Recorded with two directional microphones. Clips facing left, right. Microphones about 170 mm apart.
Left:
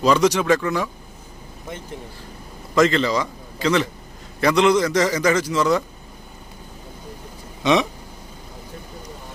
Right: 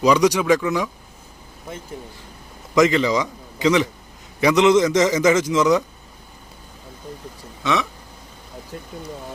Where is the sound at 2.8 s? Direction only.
15° right (ahead or behind).